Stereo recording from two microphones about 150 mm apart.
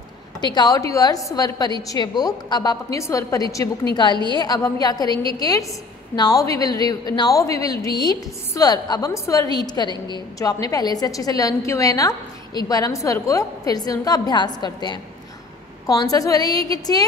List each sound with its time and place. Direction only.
0.4 s a woman's voice: 30° left (ahead or behind)